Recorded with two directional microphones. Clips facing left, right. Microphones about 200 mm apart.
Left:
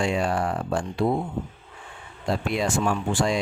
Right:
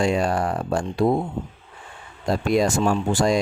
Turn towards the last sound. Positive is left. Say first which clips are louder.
# right 4 dB
turn(degrees=-40)  # may be behind; listen again after turning